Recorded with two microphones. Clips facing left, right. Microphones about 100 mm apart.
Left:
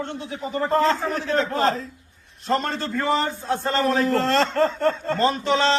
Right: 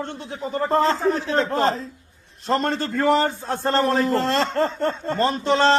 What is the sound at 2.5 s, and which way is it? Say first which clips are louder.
A man's voice: right 2 dB; 50° right (ahead or behind).